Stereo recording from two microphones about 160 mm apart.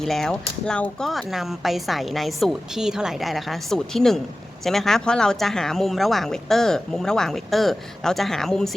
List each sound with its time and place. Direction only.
0.0 s speech: centre (ahead or behind)